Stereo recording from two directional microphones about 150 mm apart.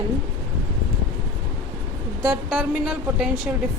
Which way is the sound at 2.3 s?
Centre (ahead or behind).